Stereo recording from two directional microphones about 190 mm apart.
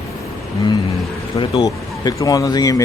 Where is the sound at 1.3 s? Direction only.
30° left (ahead or behind).